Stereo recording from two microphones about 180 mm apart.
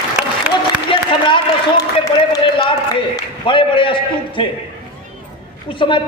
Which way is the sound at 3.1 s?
25° left (ahead or behind).